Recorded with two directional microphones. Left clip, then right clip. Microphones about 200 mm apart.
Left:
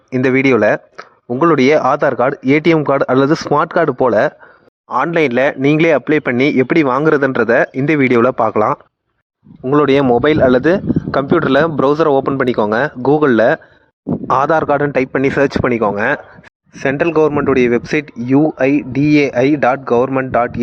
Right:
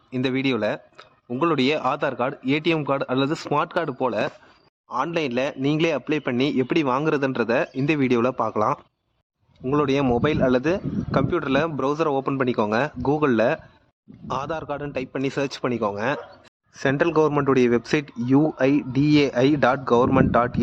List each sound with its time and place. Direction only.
0.1 s a man's voice: 40° left (ahead or behind)
9.6 s a man's voice: 40° left (ahead or behind)
14.3 s a man's voice: 50° left (ahead or behind)
16.8 s speech: 15° left (ahead or behind)